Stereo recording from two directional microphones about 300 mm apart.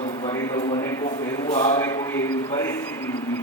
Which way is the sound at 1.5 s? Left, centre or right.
Centre.